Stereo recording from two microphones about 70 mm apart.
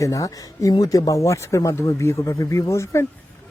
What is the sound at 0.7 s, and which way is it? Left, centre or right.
Speech, left.